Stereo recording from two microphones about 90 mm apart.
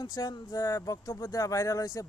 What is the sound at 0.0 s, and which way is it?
Speech, 45° left (ahead or behind).